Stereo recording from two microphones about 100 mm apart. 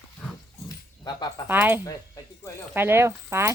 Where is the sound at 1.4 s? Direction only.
20° right (ahead or behind).